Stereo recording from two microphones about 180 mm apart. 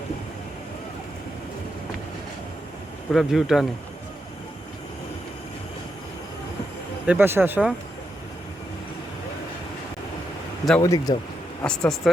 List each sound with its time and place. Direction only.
3.1 s speech: centre (ahead or behind)
7.1 s speech: 10° right (ahead or behind)
10.8 s speech: 20° left (ahead or behind)
11.6 s speech: 5° left (ahead or behind)